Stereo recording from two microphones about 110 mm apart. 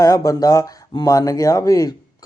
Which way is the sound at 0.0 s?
30° left (ahead or behind).